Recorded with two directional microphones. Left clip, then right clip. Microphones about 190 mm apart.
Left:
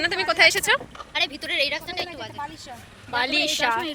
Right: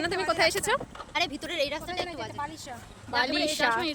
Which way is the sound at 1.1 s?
60° right (ahead or behind).